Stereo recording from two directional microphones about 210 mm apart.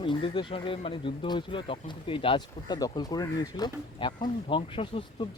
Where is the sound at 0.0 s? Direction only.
25° left (ahead or behind).